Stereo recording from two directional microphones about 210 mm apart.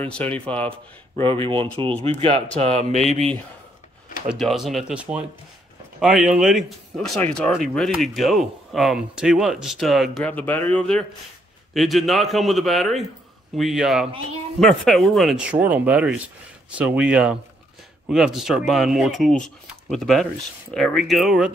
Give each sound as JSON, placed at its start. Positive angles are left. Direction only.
{"t": 0.0, "sound": "speech", "side_deg": 5}
{"t": 1.4, "sound": "speech", "side_deg": -25}
{"t": 4.3, "sound": "speech", "side_deg": 0}